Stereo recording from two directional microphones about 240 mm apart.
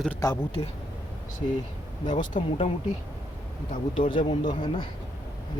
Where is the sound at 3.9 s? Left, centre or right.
Left.